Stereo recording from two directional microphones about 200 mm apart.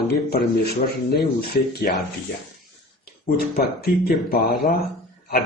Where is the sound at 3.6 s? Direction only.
50° left (ahead or behind).